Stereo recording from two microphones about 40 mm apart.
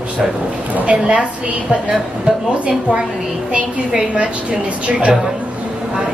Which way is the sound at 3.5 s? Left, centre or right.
Right.